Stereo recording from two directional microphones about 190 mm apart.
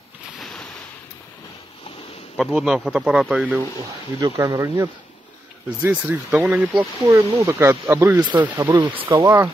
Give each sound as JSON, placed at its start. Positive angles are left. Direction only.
{"t": 0.4, "sound": "a sound", "side_deg": 0}
{"t": 2.3, "sound": "speech", "side_deg": 0}
{"t": 4.2, "sound": "speech", "side_deg": -20}
{"t": 5.9, "sound": "speech", "side_deg": -10}
{"t": 8.5, "sound": "speech", "side_deg": -25}